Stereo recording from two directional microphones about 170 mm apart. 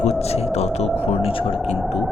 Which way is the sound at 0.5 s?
40° left (ahead or behind).